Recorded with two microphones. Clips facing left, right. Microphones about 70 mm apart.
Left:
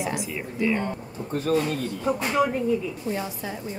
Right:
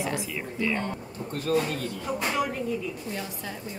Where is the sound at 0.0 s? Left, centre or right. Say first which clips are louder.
Left 2 dB; centre.